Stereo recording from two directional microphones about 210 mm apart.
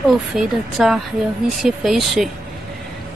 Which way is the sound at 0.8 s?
5° right (ahead or behind).